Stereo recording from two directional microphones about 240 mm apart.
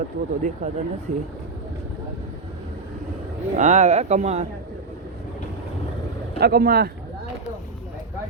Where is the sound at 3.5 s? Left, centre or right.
Right.